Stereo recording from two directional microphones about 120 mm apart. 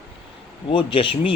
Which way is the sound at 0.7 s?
45° left (ahead or behind).